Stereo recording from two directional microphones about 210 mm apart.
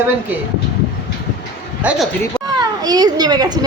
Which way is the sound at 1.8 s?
5° right (ahead or behind).